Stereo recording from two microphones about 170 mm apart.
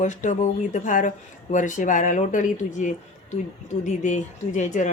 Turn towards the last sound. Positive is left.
turn(degrees=45)  # may be behind; listen again after turning